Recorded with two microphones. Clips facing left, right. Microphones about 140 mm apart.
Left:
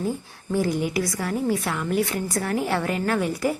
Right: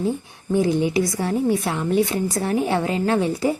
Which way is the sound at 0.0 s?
20° right (ahead or behind).